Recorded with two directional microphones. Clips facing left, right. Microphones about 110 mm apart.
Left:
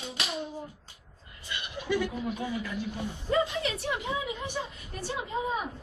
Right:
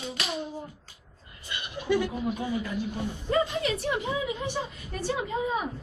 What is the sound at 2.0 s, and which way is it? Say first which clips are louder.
Speech: right 2 dB; 5° right (ahead or behind).